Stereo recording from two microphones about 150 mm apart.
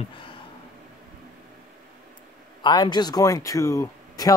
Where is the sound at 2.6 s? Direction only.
30° left (ahead or behind).